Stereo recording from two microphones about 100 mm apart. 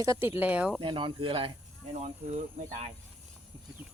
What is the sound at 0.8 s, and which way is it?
Speech, 55° right (ahead or behind).